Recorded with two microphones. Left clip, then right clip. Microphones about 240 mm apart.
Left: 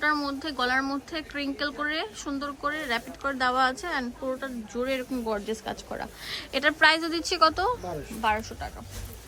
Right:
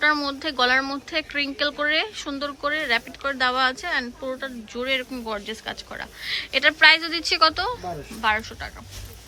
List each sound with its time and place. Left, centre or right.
0.0 s speech: centre